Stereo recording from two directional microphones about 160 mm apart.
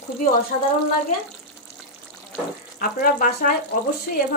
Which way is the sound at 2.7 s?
60° left (ahead or behind).